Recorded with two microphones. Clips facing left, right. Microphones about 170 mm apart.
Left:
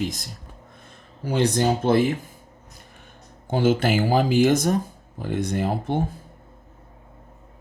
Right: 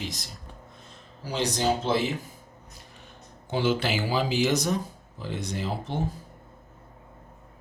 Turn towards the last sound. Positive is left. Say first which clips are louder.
# left 7 dB
turn(degrees=55)  # may be behind; listen again after turning